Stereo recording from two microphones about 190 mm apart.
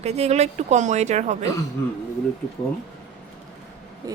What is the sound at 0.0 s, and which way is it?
Speech, 35° right (ahead or behind).